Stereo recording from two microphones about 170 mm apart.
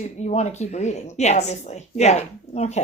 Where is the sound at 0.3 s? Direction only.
40° left (ahead or behind).